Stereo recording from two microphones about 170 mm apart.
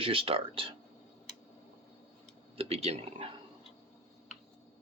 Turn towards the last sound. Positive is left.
turn(degrees=-35)  # may be behind; listen again after turning